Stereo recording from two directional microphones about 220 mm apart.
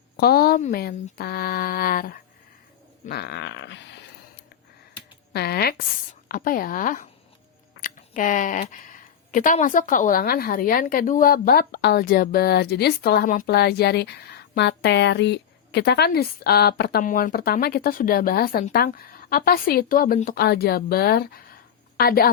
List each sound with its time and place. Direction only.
0.2 s speech: 45° left (ahead or behind)
5.3 s a woman's voice: 45° left (ahead or behind)